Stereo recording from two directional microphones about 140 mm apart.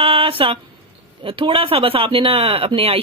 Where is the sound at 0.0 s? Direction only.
40° right (ahead or behind).